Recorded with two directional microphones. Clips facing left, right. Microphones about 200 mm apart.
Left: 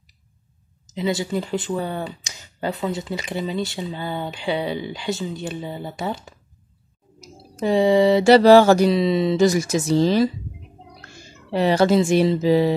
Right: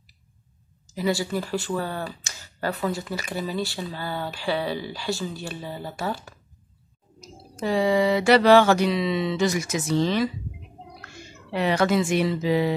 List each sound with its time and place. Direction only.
0.8 s speech: 20° left (ahead or behind)
7.6 s mantra: 25° left (ahead or behind)
11.5 s mantra: 35° left (ahead or behind)